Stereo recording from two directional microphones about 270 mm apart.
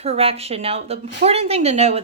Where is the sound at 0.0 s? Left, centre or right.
Right.